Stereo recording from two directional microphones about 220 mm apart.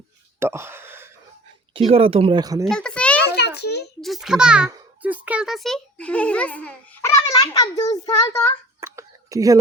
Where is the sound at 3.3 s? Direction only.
50° left (ahead or behind).